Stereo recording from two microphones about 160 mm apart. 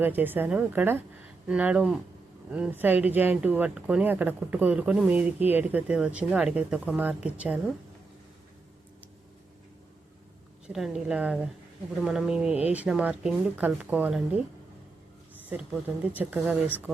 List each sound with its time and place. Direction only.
0.0 s speech: 10° right (ahead or behind)
10.7 s a woman's voice: 5° right (ahead or behind)
15.4 s speech: 10° right (ahead or behind)